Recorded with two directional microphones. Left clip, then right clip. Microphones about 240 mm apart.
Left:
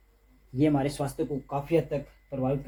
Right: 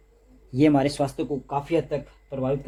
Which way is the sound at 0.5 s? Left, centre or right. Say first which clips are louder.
Right 6 dB; right.